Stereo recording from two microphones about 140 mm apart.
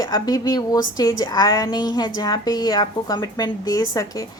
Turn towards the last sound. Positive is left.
turn(degrees=25)  # may be behind; listen again after turning